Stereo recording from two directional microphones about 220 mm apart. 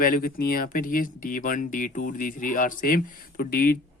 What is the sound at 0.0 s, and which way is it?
Speech, 40° left (ahead or behind).